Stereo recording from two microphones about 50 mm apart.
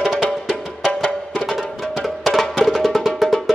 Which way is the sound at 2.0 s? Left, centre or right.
Centre.